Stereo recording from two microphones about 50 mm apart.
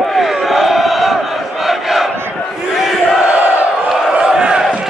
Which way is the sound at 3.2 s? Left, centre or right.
Right.